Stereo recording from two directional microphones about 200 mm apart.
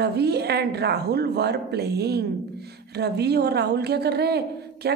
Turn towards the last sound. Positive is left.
turn(degrees=-55)  # may be behind; listen again after turning